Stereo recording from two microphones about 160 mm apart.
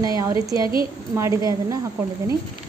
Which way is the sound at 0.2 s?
20° right (ahead or behind).